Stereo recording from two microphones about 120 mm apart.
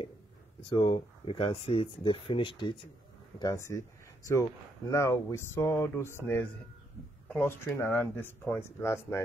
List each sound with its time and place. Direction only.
0.7 s speech: 45° left (ahead or behind)
3.3 s speech: 25° left (ahead or behind)